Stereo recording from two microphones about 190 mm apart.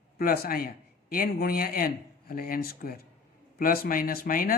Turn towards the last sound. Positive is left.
turn(degrees=50)  # may be behind; listen again after turning